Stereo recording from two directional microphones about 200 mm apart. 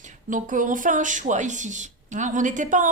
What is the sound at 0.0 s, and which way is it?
Speech, 40° right (ahead or behind).